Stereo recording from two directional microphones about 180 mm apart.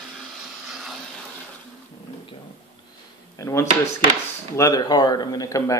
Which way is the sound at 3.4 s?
15° left (ahead or behind).